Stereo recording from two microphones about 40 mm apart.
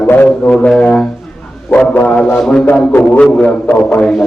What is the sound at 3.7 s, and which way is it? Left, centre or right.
Speech, left.